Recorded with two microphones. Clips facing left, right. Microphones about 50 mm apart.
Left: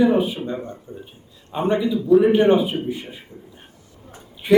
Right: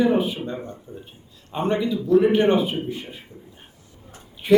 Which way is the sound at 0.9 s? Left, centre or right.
Left.